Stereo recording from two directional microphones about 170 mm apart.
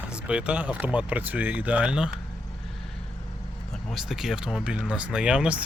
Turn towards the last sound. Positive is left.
turn(degrees=-5)  # may be behind; listen again after turning